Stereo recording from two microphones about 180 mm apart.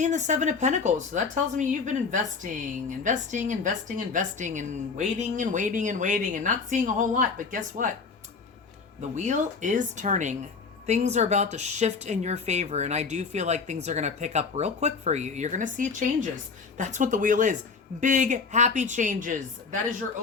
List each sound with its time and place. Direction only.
0.0 s a woman's voice: 40° right (ahead or behind)
9.0 s a woman's voice: 40° right (ahead or behind)